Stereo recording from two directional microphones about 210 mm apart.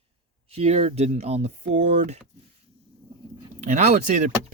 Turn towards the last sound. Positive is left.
turn(degrees=-35)  # may be behind; listen again after turning